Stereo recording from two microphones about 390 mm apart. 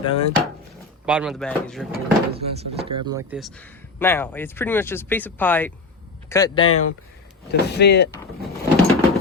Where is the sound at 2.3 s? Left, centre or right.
Centre.